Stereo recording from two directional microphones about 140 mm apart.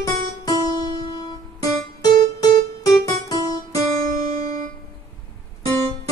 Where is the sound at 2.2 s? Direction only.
25° left (ahead or behind).